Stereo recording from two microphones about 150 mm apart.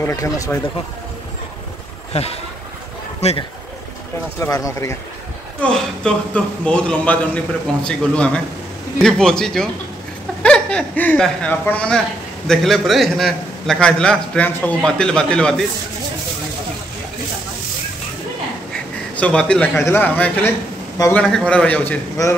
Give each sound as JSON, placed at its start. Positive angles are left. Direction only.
{"t": 0.0, "sound": "speech", "side_deg": 20}
{"t": 2.1, "sound": "speech", "side_deg": 45}
{"t": 4.4, "sound": "speech", "side_deg": 20}
{"t": 5.6, "sound": "a man's voice", "side_deg": 5}
{"t": 19.1, "sound": "a man's voice", "side_deg": 10}
{"t": 22.2, "sound": "speech", "side_deg": 20}